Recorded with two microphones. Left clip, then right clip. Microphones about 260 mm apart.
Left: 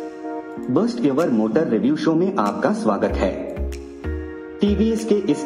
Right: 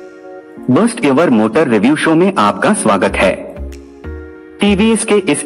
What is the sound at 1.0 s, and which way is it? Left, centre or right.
A man's voice, right.